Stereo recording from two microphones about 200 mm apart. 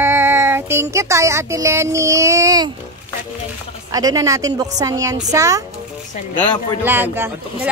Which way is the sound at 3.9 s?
15° right (ahead or behind).